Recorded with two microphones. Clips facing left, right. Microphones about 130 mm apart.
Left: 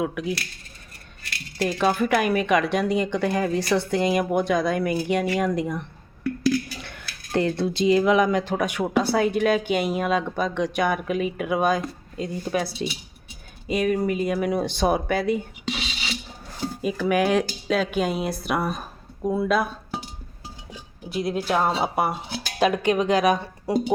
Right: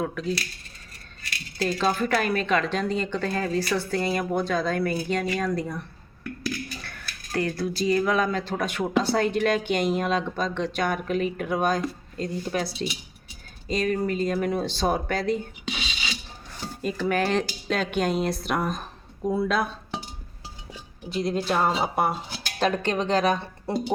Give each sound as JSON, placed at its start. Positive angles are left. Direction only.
{"t": 0.0, "sound": "speech", "side_deg": 10}
{"t": 1.6, "sound": "speech", "side_deg": 10}
{"t": 6.2, "sound": "a sound", "side_deg": 90}
{"t": 6.7, "sound": "speech", "side_deg": 20}
{"t": 13.7, "sound": "speech", "side_deg": 10}
{"t": 16.8, "sound": "speech", "side_deg": 10}
{"t": 21.1, "sound": "speech", "side_deg": 10}